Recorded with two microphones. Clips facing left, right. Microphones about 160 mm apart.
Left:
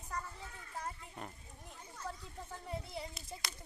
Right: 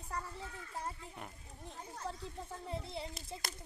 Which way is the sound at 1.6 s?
30° right (ahead or behind).